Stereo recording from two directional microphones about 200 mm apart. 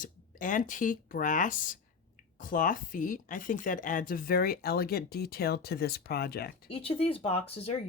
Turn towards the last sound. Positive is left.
turn(degrees=30)  # may be behind; listen again after turning